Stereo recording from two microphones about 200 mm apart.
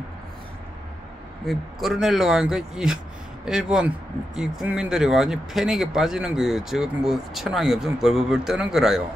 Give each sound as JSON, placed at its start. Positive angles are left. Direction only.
{"t": 1.5, "sound": "speech", "side_deg": 0}